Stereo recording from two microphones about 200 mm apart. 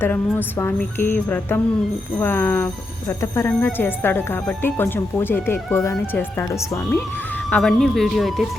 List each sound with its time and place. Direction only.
0.0 s speech: 10° left (ahead or behind)
7.5 s speech: centre (ahead or behind)